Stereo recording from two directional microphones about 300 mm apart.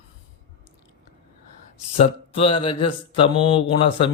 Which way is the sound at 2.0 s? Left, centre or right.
Centre.